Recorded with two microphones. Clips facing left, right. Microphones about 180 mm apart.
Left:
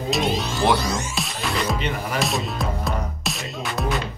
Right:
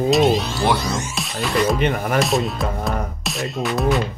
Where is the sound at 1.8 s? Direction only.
55° right (ahead or behind).